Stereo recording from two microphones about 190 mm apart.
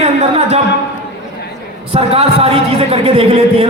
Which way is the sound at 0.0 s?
35° right (ahead or behind).